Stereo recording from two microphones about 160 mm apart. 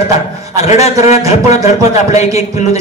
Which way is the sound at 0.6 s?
45° left (ahead or behind).